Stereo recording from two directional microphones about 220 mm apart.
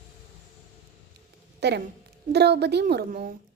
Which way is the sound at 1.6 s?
50° right (ahead or behind).